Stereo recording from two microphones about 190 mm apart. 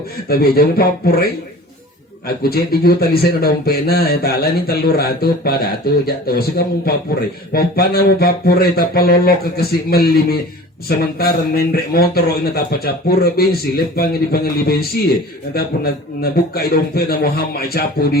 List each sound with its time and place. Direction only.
0.3 s a man's voice: 55° left (ahead or behind)
2.2 s a man's voice: 55° left (ahead or behind)